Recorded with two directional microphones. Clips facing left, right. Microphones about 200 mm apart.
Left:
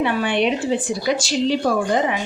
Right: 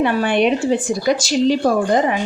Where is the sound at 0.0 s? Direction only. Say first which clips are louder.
Right 3 dB; 45° right (ahead or behind).